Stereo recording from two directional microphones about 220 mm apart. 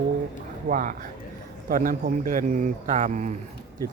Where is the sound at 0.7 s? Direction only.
35° right (ahead or behind).